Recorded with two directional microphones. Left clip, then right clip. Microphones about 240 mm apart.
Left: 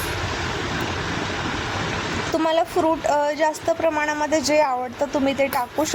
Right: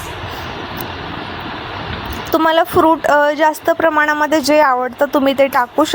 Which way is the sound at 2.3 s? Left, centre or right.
Centre.